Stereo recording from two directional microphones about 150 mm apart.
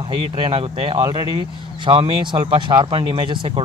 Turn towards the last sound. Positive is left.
turn(degrees=-35)  # may be behind; listen again after turning